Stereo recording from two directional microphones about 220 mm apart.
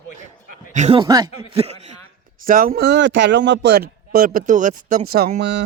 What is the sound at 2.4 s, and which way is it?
A man's voice, 40° right (ahead or behind).